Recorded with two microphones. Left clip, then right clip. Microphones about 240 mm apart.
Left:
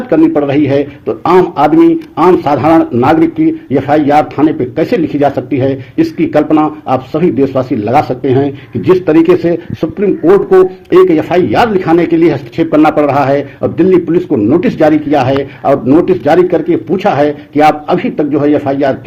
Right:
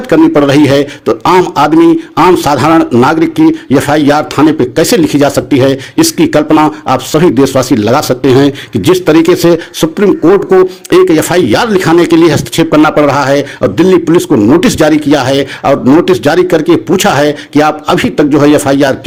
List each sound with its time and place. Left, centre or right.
0.1 s a man's voice: right